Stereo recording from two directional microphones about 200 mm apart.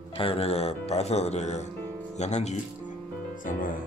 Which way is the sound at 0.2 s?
30° left (ahead or behind).